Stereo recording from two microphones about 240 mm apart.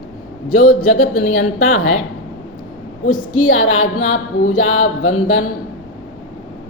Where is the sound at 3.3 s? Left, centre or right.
Left.